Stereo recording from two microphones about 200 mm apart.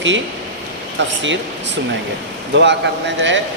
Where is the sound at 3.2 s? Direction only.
65° right (ahead or behind).